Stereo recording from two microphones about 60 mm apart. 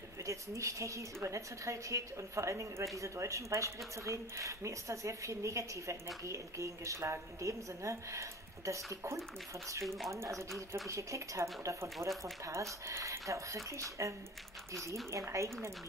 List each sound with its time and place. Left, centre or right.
0.2 s speech: right
9.8 s speech: centre
10.9 s speech: right
11.6 s speech: right